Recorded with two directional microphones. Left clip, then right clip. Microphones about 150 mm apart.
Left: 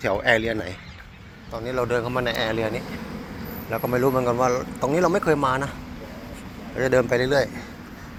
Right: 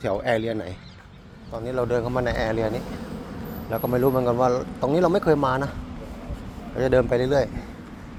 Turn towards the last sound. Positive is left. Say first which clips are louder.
# left 1 dB
turn(degrees=-20)  # may be behind; listen again after turning